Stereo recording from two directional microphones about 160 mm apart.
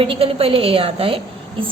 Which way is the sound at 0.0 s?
35° right (ahead or behind).